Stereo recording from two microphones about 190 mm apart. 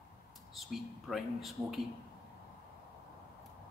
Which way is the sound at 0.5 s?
Centre (ahead or behind).